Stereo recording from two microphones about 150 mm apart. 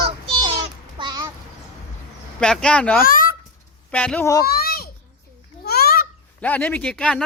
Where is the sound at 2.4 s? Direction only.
5° left (ahead or behind).